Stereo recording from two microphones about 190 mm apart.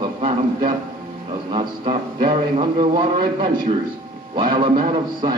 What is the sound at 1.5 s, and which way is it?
A man's voice, 25° right (ahead or behind).